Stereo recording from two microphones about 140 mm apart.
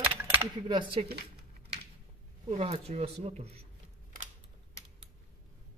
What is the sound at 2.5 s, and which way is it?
Speech, 50° right (ahead or behind).